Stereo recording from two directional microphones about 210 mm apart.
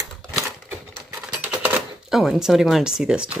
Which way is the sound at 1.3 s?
5° right (ahead or behind).